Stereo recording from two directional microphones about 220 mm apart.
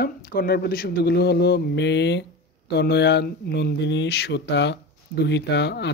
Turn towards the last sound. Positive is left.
turn(degrees=50)  # may be behind; listen again after turning